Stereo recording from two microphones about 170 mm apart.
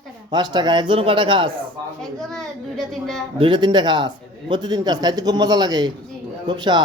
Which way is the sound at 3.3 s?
30° right (ahead or behind).